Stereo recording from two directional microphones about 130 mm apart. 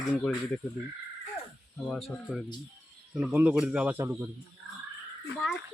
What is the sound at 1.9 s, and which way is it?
A man's voice, centre (ahead or behind).